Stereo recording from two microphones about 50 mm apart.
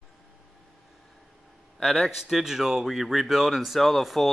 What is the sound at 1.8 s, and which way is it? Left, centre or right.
Speech, centre.